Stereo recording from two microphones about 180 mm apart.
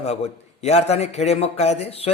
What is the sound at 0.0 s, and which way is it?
A man's voice, 35° left (ahead or behind).